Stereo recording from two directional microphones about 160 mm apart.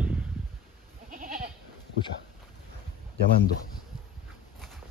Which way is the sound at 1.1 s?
60° right (ahead or behind).